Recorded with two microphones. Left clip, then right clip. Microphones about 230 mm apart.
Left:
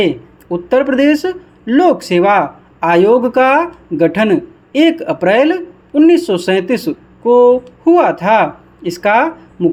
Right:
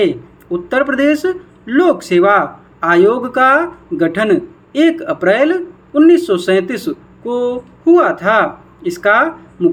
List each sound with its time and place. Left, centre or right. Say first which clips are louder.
0.0 s speech: even; left